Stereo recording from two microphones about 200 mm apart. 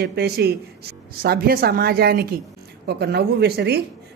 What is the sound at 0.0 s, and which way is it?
A woman's voice, 55° right (ahead or behind).